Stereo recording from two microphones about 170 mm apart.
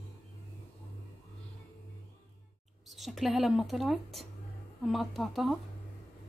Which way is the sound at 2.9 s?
Centre (ahead or behind).